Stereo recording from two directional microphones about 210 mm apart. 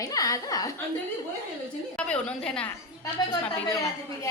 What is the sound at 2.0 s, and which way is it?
Speech, 5° left (ahead or behind).